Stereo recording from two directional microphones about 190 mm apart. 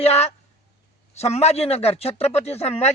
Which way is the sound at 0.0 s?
35° left (ahead or behind).